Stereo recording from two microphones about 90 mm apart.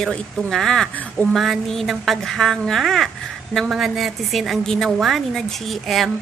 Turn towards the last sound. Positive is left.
turn(degrees=0)  # may be behind; listen again after turning